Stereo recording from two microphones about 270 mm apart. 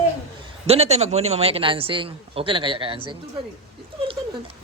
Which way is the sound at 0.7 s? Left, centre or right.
Right.